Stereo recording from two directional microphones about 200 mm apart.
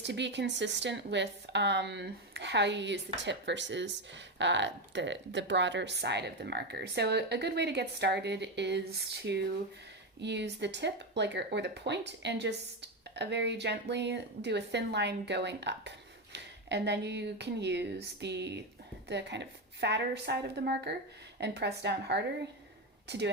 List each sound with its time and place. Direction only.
0.0 s speech: 60° right (ahead or behind)